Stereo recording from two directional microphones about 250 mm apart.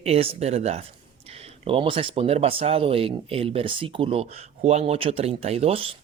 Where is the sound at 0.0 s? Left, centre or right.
Right.